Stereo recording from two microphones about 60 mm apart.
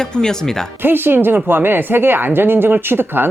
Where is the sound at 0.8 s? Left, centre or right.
Right.